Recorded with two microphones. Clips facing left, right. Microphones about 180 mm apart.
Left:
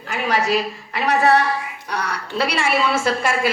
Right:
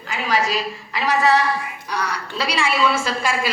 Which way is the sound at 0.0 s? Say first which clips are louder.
Left 1 dB; 60° left (ahead or behind).